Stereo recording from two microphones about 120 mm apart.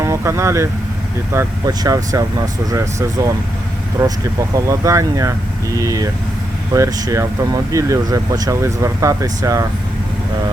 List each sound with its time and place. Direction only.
0.0 s speech: 25° right (ahead or behind)